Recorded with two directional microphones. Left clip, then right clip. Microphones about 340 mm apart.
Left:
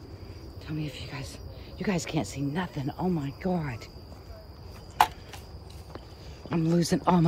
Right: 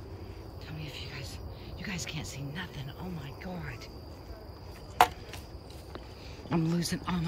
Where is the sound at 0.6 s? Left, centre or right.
Centre.